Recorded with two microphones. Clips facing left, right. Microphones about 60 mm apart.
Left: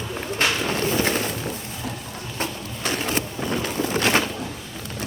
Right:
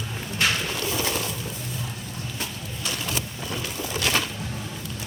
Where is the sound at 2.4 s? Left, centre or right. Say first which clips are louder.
Left 7 dB; left.